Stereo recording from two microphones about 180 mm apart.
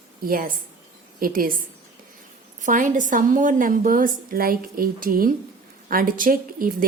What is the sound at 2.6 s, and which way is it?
A woman's voice, 45° right (ahead or behind).